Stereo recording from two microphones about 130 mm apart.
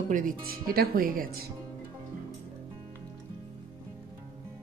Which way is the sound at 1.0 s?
90° right.